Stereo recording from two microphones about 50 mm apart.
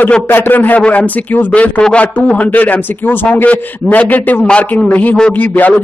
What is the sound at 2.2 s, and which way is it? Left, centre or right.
A man's voice, left.